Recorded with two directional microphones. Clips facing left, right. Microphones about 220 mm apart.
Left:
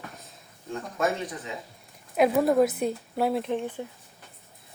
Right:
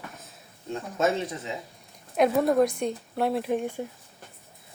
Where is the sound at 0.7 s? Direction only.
25° right (ahead or behind).